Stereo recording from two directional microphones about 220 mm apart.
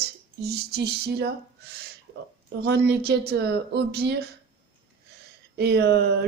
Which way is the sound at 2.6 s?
50° right (ahead or behind).